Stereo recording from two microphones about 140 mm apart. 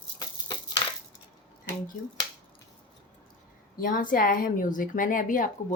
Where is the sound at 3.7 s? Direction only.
80° left.